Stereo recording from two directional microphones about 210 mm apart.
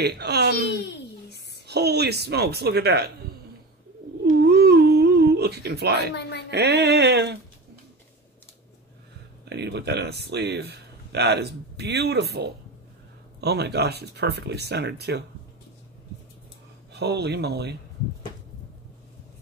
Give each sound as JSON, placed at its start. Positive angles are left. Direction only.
{"t": 0.0, "sound": "speech", "side_deg": -50}
{"t": 0.7, "sound": "a sound", "side_deg": 50}
{"t": 1.7, "sound": "speech", "side_deg": -50}
{"t": 4.2, "sound": "humming", "side_deg": -50}
{"t": 6.5, "sound": "speech", "side_deg": -50}
{"t": 9.4, "sound": "speech", "side_deg": -55}
{"t": 16.9, "sound": "speech", "side_deg": -50}